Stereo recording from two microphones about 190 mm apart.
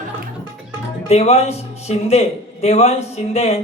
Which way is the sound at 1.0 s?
35° left (ahead or behind).